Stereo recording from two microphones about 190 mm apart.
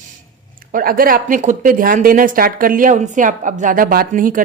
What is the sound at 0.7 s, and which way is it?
Speech, 50° right (ahead or behind).